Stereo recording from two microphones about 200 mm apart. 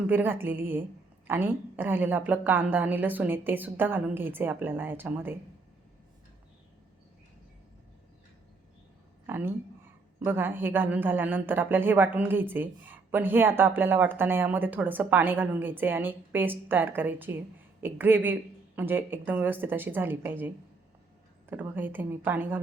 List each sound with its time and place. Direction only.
0.1 s a woman's voice: 10° right (ahead or behind)
9.2 s a sound: 10° right (ahead or behind)
10.2 s a woman's voice: 10° right (ahead or behind)
21.5 s a woman's voice: 10° right (ahead or behind)